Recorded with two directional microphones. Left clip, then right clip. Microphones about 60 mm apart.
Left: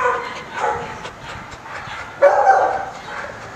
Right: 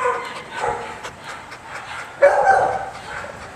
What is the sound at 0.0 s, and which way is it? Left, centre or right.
Dog, centre.